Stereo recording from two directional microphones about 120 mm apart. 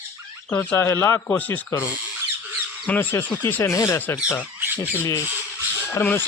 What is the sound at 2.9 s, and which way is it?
Speech, 15° left (ahead or behind).